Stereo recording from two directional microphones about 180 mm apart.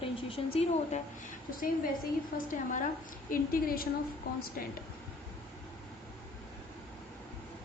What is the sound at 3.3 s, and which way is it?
Speech, 55° left (ahead or behind).